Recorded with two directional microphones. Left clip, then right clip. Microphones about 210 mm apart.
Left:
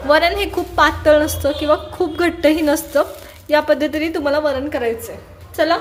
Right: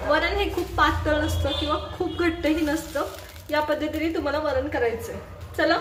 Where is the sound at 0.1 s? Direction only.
40° left (ahead or behind).